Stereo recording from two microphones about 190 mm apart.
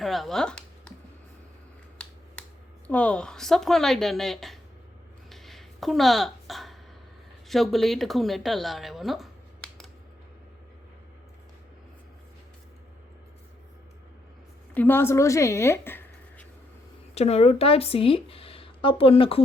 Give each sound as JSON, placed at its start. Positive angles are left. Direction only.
{"t": 0.0, "sound": "speech", "side_deg": 0}
{"t": 2.8, "sound": "a woman's voice", "side_deg": 5}
{"t": 5.3, "sound": "a sound", "side_deg": 0}
{"t": 7.4, "sound": "speech", "side_deg": 0}
{"t": 14.7, "sound": "speech", "side_deg": 10}
{"t": 17.2, "sound": "speech", "side_deg": 35}